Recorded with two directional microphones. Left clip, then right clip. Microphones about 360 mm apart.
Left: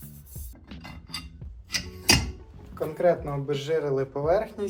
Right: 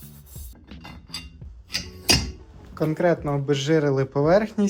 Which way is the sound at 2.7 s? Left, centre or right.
Right.